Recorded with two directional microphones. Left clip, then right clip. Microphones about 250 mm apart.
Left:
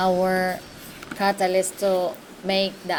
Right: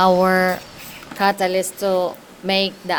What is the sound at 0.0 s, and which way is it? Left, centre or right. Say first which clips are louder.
A woman's voice: right 6 dB; right.